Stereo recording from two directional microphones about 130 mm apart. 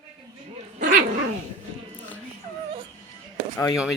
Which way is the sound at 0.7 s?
90° right.